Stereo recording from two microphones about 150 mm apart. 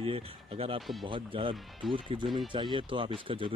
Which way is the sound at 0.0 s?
40° right (ahead or behind).